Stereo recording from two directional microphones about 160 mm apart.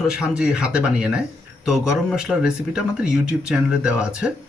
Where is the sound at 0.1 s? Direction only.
5° right (ahead or behind).